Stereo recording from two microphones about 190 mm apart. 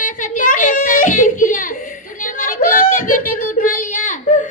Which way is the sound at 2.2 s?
45° left (ahead or behind).